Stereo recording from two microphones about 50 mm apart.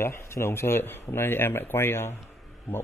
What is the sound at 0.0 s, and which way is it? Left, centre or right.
A man's voice, left.